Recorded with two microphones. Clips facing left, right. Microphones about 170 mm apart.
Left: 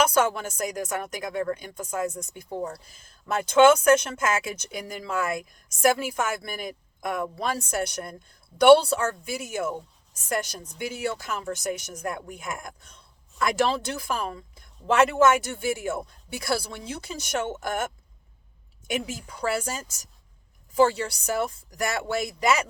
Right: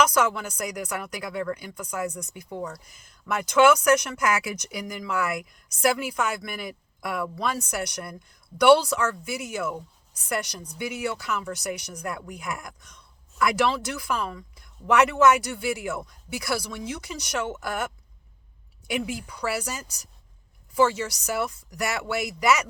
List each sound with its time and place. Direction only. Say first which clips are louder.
0.0 s a woman's voice: even; 30° left (ahead or behind)
20.7 s a woman's voice: left 1 dB; 30° left (ahead or behind)